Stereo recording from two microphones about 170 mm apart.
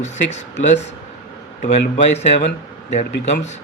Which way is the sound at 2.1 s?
45° left (ahead or behind).